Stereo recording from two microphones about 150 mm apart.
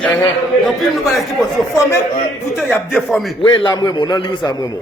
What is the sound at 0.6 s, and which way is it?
Speech, centre (ahead or behind).